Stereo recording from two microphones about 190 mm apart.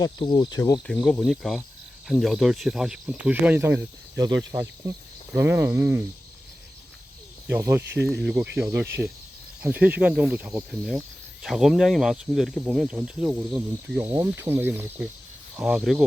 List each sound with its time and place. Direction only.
0.0 s speech: 25° left (ahead or behind)
0.6 s speech: 10° left (ahead or behind)
0.9 s speech: centre (ahead or behind)
7.4 s speech: 10° right (ahead or behind)